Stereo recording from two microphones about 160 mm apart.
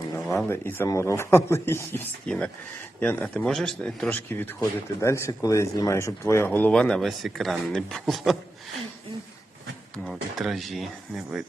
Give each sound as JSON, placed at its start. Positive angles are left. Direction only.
{"t": 0.4, "sound": "speech", "side_deg": 15}
{"t": 10.0, "sound": "speech", "side_deg": 0}